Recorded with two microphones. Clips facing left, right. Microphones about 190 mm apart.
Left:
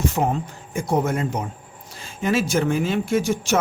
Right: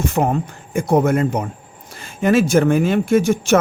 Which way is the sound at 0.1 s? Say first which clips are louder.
Right 4 dB; 60° right (ahead or behind).